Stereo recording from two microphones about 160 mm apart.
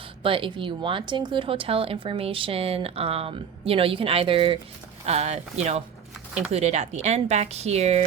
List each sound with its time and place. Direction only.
0.2 s speech: 35° right (ahead or behind)
6.5 s speech: 40° right (ahead or behind)